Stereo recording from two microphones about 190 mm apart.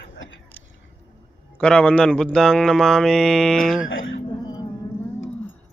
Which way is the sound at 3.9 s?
90° left.